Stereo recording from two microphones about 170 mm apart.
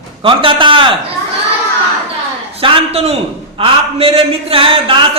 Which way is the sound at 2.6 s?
35° right (ahead or behind).